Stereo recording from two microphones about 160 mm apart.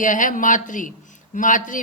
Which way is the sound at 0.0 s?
55° left (ahead or behind).